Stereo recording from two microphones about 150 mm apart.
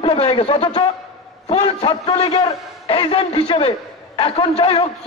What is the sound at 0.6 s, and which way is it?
Speech, 25° left (ahead or behind).